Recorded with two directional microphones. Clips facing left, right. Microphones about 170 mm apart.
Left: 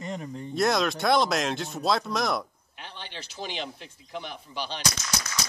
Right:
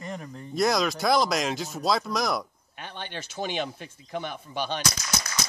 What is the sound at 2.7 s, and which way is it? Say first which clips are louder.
Speech: right 4 dB; 55° right (ahead or behind).